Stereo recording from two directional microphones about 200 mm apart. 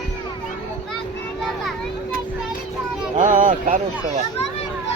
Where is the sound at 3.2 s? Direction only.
40° right (ahead or behind).